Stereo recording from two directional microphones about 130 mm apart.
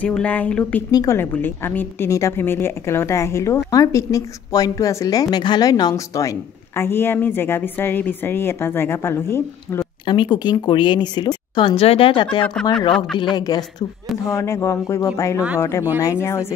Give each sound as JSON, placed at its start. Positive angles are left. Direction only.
{"t": 0.0, "sound": "speech", "side_deg": 10}
{"t": 0.9, "sound": "a woman's voice", "side_deg": 20}
{"t": 10.0, "sound": "a woman's voice", "side_deg": 35}